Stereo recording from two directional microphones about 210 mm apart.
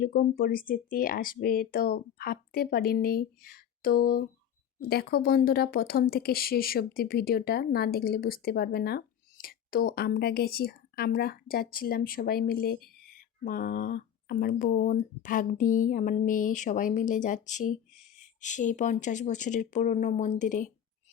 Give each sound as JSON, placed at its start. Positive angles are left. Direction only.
{"t": 0.0, "sound": "speech", "side_deg": 45}